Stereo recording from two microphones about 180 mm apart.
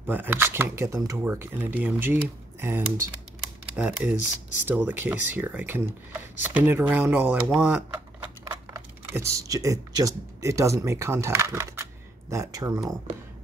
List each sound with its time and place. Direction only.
0.0 s speech: 10° right (ahead or behind)